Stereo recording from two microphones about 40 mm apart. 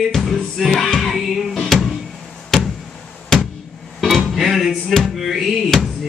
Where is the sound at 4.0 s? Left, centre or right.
Centre.